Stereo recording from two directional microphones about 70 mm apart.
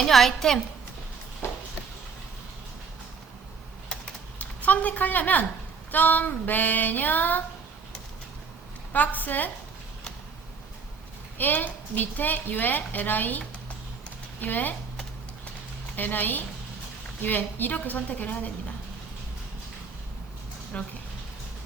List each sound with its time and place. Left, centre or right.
0.0 s a woman's voice: centre
1.4 s a sound: left
4.4 s a woman's voice: left
8.9 s a woman's voice: left
11.3 s a woman's voice: left
16.0 s a woman's voice: left
20.7 s a woman's voice: centre